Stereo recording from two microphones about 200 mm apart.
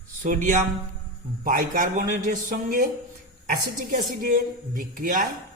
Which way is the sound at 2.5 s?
40° right (ahead or behind).